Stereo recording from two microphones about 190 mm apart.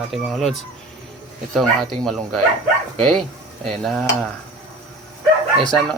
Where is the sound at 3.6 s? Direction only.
5° left (ahead or behind).